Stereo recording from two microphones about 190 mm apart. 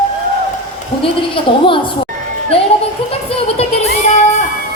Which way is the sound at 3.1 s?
30° left (ahead or behind).